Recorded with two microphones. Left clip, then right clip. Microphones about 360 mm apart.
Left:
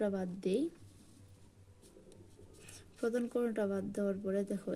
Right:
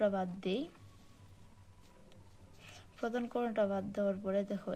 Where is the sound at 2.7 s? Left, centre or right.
Right.